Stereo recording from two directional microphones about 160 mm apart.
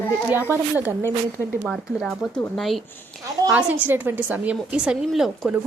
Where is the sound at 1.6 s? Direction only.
Centre (ahead or behind).